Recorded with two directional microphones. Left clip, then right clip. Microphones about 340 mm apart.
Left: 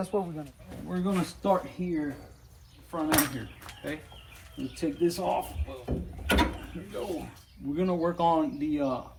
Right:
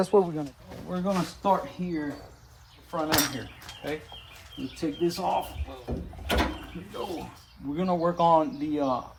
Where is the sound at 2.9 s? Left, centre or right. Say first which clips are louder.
Right 2 dB; centre.